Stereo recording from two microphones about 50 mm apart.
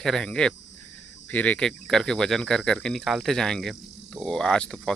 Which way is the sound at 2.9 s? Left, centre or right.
Centre.